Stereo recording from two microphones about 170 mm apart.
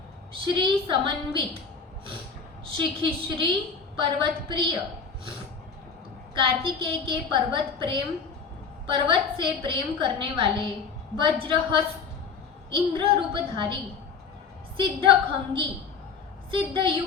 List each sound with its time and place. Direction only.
0.4 s a woman's voice: 30° right (ahead or behind)
2.7 s a woman's voice: 30° right (ahead or behind)
6.3 s a woman's voice: 30° right (ahead or behind)
14.8 s a woman's voice: 30° right (ahead or behind)